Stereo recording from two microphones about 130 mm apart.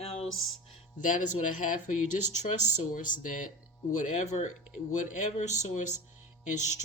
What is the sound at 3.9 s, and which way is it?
Speech, 70° left (ahead or behind).